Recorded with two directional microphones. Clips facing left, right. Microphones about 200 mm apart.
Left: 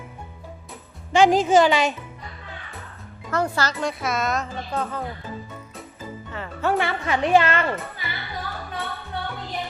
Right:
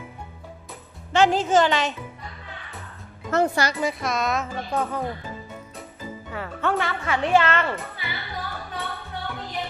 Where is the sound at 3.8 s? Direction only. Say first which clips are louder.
Even; centre (ahead or behind).